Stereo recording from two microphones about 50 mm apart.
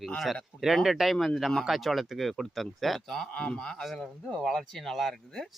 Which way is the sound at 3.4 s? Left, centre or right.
Centre.